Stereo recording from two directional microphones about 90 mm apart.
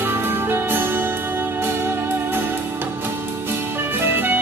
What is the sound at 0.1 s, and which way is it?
Music, 25° right (ahead or behind).